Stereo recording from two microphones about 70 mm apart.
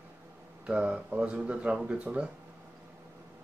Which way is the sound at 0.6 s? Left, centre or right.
Centre.